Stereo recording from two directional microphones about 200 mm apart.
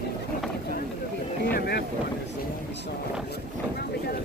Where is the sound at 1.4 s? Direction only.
55° left (ahead or behind).